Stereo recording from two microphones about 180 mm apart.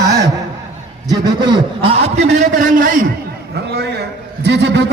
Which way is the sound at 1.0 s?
20° right (ahead or behind).